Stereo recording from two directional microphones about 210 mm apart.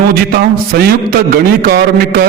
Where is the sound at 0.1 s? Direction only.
45° right (ahead or behind).